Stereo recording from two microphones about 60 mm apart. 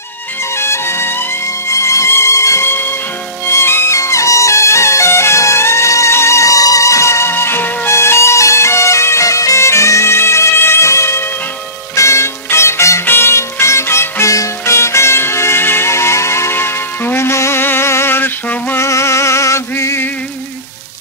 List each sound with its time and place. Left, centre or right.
0.6 s music: left
1.7 s music: left
3.4 s music: left
7.9 s bagpipes: left
11.9 s music: left
13.0 s music: left
14.3 s music: left
18.8 s a sound: left